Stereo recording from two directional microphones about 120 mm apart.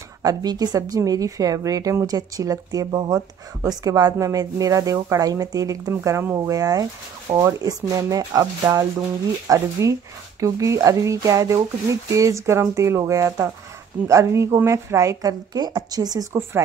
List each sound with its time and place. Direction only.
0.2 s a woman's voice: 30° right (ahead or behind)